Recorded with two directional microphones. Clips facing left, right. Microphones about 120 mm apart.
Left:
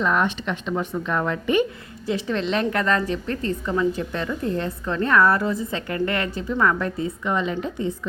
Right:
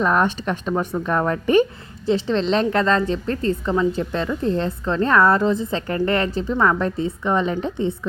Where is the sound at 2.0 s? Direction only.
30° right (ahead or behind).